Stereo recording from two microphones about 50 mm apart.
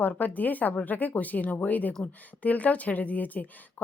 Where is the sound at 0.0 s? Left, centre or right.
Left.